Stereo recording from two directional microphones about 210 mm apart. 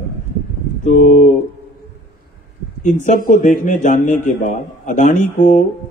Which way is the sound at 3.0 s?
40° left (ahead or behind).